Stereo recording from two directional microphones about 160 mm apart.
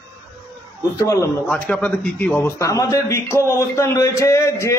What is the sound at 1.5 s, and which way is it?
A man's voice, 10° left (ahead or behind).